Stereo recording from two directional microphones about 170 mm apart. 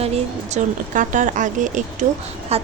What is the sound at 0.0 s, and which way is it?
A woman's voice, 40° right (ahead or behind).